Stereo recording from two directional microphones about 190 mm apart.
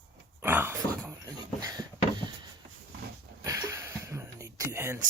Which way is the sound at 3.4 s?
15° right (ahead or behind).